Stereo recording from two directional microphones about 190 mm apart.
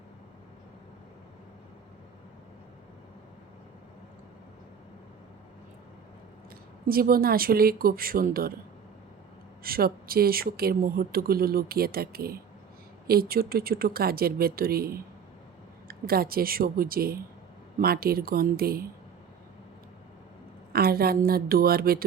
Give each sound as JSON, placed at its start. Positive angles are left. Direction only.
{"t": 6.8, "sound": "speech", "side_deg": -50}
{"t": 9.6, "sound": "speech", "side_deg": -50}
{"t": 20.7, "sound": "speech", "side_deg": -55}